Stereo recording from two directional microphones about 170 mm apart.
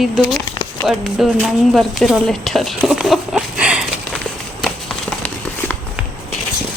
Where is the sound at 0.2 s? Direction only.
Centre (ahead or behind).